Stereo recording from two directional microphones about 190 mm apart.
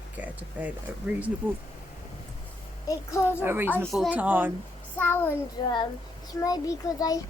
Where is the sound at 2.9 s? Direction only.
15° left (ahead or behind).